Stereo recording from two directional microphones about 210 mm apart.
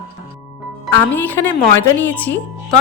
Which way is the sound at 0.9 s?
10° left (ahead or behind).